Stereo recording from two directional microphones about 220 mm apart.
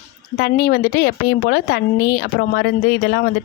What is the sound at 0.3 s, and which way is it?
A woman's voice, 45° left (ahead or behind).